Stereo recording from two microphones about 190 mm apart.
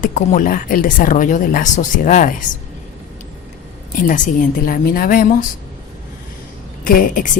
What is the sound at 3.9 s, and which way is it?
Speech, 45° left (ahead or behind).